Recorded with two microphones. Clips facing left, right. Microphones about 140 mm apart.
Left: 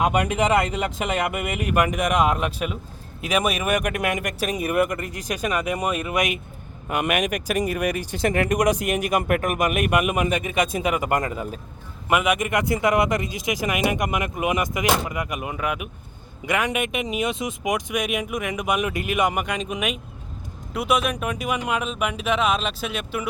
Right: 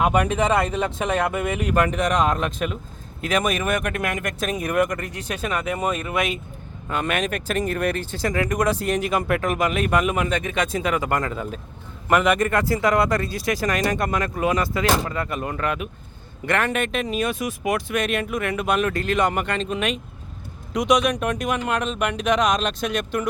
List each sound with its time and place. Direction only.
0.3 s speech: 10° left (ahead or behind)